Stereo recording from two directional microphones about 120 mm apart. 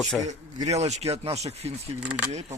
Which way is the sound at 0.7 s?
65° right (ahead or behind).